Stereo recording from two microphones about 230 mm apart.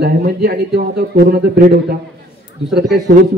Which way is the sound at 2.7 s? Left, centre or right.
Right.